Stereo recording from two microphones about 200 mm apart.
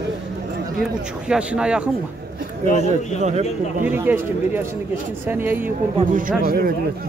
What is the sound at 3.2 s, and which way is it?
Speech, 35° right (ahead or behind).